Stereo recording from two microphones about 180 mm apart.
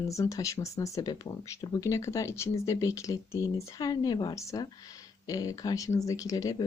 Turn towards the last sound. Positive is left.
turn(degrees=20)  # may be behind; listen again after turning